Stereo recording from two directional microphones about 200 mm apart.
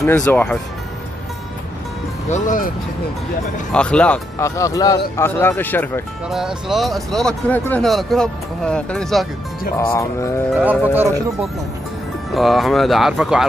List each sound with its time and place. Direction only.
0.0 s speech: 10° left (ahead or behind)
2.3 s speech: 40° left (ahead or behind)
3.7 s speech: 5° left (ahead or behind)
6.3 s speech: centre (ahead or behind)
9.9 s speech: 15° left (ahead or behind)
10.6 s speech: 10° right (ahead or behind)
12.4 s speech: centre (ahead or behind)